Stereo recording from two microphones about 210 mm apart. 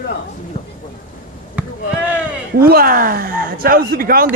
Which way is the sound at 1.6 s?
5° right (ahead or behind).